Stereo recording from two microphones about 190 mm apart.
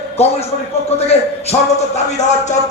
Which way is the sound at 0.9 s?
35° left (ahead or behind).